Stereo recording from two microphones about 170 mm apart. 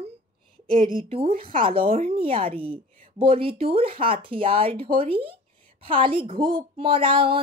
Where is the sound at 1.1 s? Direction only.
35° right (ahead or behind).